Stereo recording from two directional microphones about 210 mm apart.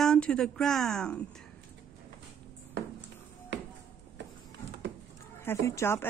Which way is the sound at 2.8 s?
55° right (ahead or behind).